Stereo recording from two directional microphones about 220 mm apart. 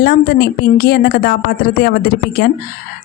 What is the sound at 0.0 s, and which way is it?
Speech, 45° left (ahead or behind).